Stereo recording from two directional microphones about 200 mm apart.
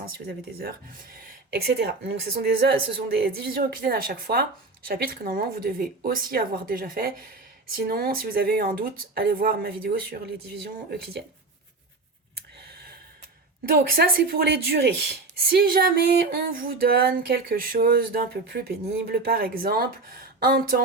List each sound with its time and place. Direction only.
0.0 s speech: 50° right (ahead or behind)
12.6 s gasp: 50° right (ahead or behind)
13.7 s speech: 50° right (ahead or behind)